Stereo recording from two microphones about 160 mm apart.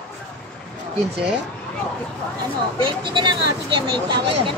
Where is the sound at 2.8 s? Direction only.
30° right (ahead or behind).